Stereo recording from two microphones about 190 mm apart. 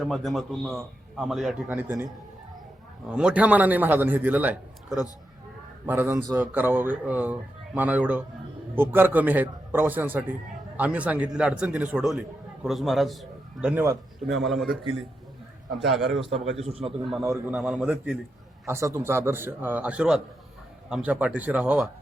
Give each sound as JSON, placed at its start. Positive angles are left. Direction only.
{"t": 0.0, "sound": "a man's voice", "side_deg": 0}
{"t": 3.1, "sound": "a man's voice", "side_deg": -5}
{"t": 15.9, "sound": "a man's voice", "side_deg": 0}
{"t": 16.4, "sound": "a man's voice", "side_deg": -35}
{"t": 17.3, "sound": "a man's voice", "side_deg": 0}